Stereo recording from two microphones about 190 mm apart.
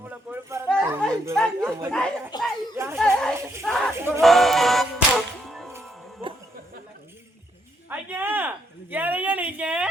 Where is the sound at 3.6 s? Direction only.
5° left (ahead or behind).